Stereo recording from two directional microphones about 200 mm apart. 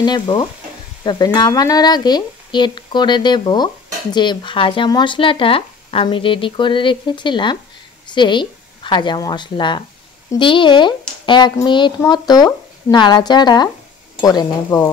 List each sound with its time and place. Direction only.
0.0 s speech: 20° left (ahead or behind)